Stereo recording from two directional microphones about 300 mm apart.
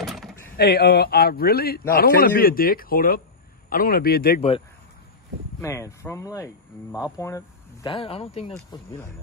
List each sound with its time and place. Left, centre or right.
0.0 s a sound: centre
0.6 s a man's voice: left
5.6 s speech: centre